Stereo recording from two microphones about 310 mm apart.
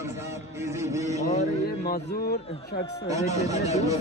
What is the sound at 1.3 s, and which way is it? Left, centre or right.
A man's voice, left.